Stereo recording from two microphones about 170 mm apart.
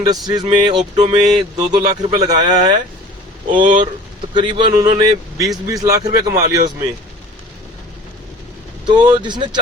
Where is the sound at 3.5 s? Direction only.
50° right (ahead or behind).